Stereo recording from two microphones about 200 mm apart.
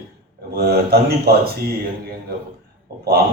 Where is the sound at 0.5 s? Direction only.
50° right (ahead or behind).